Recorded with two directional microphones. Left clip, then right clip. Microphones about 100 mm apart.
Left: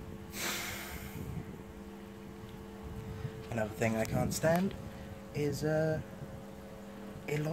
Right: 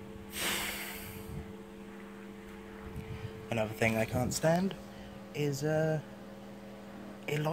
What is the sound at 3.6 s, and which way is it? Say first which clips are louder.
Speech: right 2 dB; 15° right (ahead or behind).